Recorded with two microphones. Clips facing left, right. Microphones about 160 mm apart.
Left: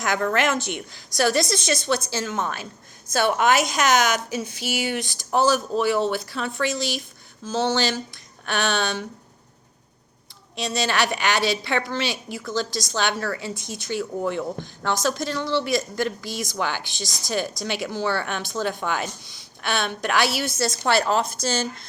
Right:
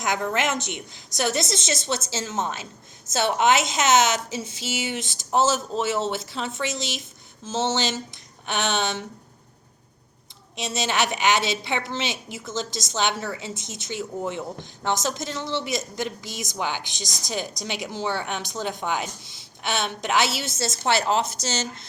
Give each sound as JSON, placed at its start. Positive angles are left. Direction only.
{"t": 0.0, "sound": "a woman's voice", "side_deg": -20}
{"t": 10.5, "sound": "a woman's voice", "side_deg": -20}